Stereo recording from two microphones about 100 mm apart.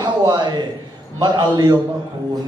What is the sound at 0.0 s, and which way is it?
A man's voice, 45° right (ahead or behind).